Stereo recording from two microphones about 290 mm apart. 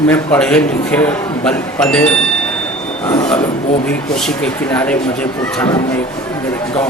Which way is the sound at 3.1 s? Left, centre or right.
Centre.